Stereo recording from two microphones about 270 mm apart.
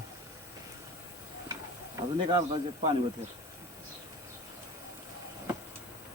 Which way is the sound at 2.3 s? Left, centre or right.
Centre.